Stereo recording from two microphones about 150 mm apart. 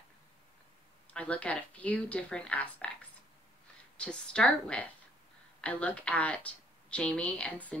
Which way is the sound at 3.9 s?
5° left (ahead or behind).